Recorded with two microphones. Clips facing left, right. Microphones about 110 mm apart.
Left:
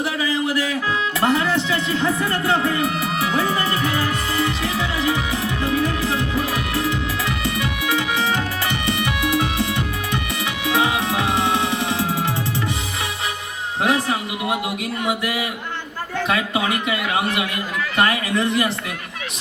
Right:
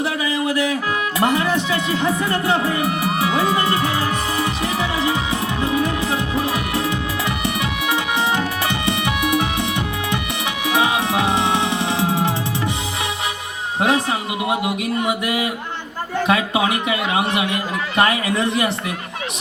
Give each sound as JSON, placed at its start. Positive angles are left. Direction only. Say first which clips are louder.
{"t": 1.2, "sound": "speech", "louder": "right 1 dB", "side_deg": -20}
{"t": 7.4, "sound": "organ", "louder": "right 1 dB", "side_deg": -20}
{"t": 8.9, "sound": "music", "louder": "right 1 dB", "side_deg": -20}
{"t": 10.7, "sound": "music", "louder": "right 1 dB", "side_deg": -20}
{"t": 13.8, "sound": "a man's voice", "louder": "right 1 dB", "side_deg": -20}